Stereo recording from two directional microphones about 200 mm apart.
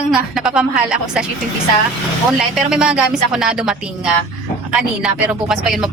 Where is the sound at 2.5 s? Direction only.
5° right (ahead or behind).